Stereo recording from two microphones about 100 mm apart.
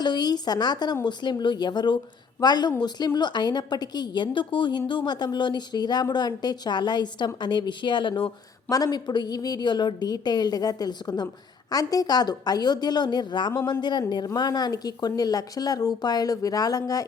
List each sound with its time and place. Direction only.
0.0 s a woman's voice: 45° left (ahead or behind)